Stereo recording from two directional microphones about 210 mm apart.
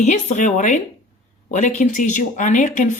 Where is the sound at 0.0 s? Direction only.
35° left (ahead or behind).